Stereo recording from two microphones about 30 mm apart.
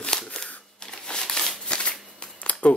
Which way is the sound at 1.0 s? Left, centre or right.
Left.